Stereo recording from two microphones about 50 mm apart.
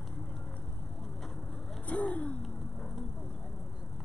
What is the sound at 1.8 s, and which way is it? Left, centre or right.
Vehicle, left.